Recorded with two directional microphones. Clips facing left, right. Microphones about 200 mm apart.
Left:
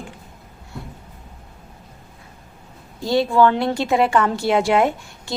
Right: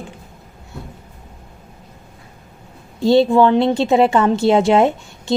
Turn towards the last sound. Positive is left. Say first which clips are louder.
# right 4 dB
turn(degrees=-25)  # may be behind; listen again after turning